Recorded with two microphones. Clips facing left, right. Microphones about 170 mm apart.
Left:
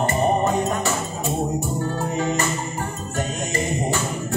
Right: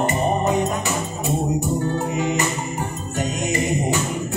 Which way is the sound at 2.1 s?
15° right (ahead or behind).